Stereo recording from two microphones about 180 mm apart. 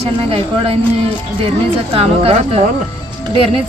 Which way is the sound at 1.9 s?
35° right (ahead or behind).